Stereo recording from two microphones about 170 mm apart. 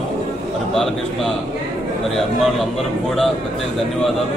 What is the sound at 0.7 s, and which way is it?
Speech, centre (ahead or behind).